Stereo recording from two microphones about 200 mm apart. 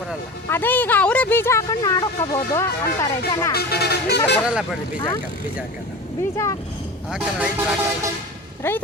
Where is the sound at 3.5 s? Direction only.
55° left (ahead or behind).